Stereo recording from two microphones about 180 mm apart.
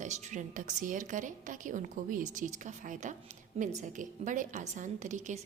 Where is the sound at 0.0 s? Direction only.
40° right (ahead or behind).